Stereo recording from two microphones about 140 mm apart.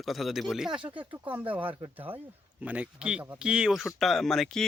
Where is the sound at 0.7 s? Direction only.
40° right (ahead or behind).